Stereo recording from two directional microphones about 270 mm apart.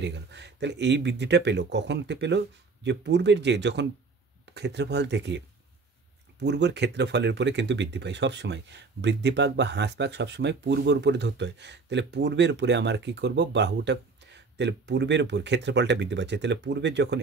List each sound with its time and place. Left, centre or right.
0.0 s speech: right
6.4 s speech: right